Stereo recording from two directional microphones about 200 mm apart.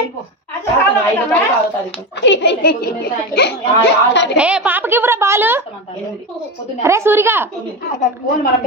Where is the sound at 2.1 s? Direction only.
60° left (ahead or behind).